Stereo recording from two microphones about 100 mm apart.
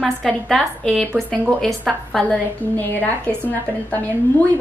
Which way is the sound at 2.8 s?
20° left (ahead or behind).